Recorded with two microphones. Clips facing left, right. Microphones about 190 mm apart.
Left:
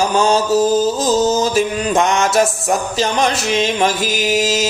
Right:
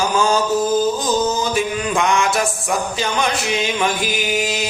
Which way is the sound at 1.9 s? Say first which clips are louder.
Left 3 dB; 40° left (ahead or behind).